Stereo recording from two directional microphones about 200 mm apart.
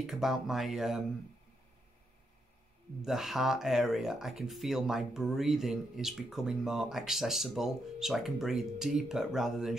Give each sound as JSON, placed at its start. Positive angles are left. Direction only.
{"t": 0.0, "sound": "speech", "side_deg": 0}
{"t": 3.0, "sound": "speech", "side_deg": 0}